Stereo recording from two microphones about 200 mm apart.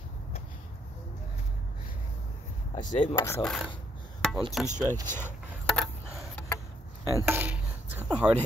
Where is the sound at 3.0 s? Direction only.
25° left (ahead or behind).